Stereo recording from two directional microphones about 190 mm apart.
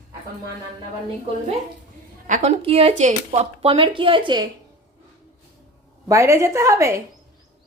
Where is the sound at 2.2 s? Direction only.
40° right (ahead or behind).